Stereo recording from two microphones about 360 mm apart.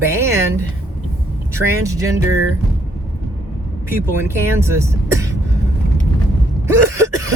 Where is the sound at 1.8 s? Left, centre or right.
Centre.